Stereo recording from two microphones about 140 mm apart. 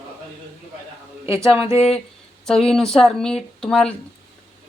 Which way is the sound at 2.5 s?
5° left (ahead or behind).